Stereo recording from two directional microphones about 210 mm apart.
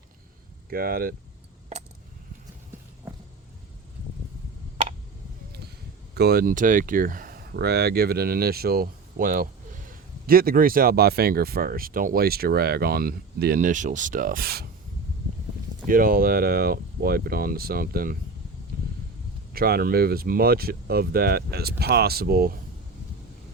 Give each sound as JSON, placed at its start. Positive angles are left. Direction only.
{"t": 0.7, "sound": "speech", "side_deg": -45}
{"t": 6.1, "sound": "speech", "side_deg": -45}
{"t": 15.9, "sound": "speech", "side_deg": -40}
{"t": 19.5, "sound": "speech", "side_deg": -45}